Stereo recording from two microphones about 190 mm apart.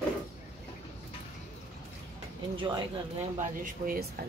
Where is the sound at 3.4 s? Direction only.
45° right (ahead or behind).